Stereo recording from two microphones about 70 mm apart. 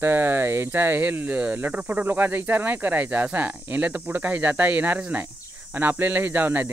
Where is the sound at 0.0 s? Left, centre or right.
Right.